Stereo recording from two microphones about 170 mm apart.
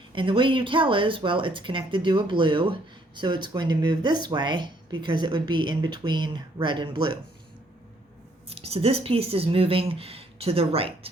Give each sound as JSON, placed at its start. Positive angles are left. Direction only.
{"t": 0.1, "sound": "speech", "side_deg": -30}
{"t": 8.4, "sound": "speech", "side_deg": -35}